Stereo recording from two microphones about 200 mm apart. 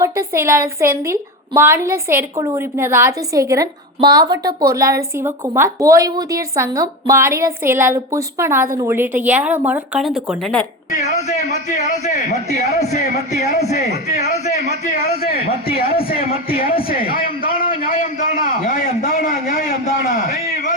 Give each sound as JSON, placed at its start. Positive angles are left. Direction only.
{"t": 0.0, "sound": "a woman's voice", "side_deg": -15}
{"t": 12.5, "sound": "a man's voice", "side_deg": 35}
{"t": 13.7, "sound": "speech", "side_deg": 55}
{"t": 15.2, "sound": "a sound", "side_deg": 50}
{"t": 16.2, "sound": "speech", "side_deg": 30}
{"t": 16.6, "sound": "a sound", "side_deg": 45}